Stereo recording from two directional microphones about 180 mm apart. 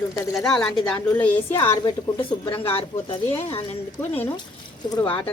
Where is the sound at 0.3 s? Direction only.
Centre (ahead or behind).